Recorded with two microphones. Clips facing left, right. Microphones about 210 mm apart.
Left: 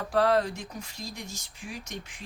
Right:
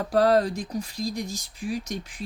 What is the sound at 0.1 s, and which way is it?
Speech, 40° right (ahead or behind).